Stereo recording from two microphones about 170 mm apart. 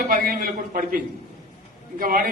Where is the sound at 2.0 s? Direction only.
60° right (ahead or behind).